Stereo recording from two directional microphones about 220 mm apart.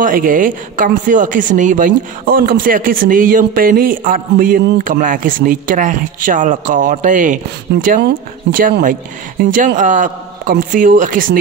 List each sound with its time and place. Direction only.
0.0 s speech: 40° right (ahead or behind)